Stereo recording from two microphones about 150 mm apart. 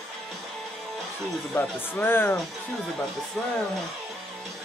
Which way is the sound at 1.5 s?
10° left (ahead or behind).